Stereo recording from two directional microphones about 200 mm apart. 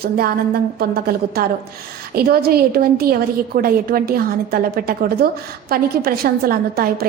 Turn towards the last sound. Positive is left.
turn(degrees=-50)  # may be behind; listen again after turning